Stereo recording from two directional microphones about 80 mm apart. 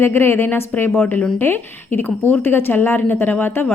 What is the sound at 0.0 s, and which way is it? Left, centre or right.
A woman's voice, left.